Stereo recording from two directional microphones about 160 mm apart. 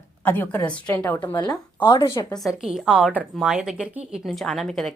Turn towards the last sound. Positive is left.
turn(degrees=0)  # may be behind; listen again after turning